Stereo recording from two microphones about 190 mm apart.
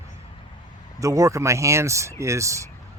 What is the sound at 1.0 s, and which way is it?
A man's voice, 15° right (ahead or behind).